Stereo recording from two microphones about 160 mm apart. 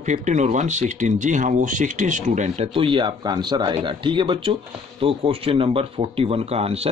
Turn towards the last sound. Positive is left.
turn(degrees=-40)  # may be behind; listen again after turning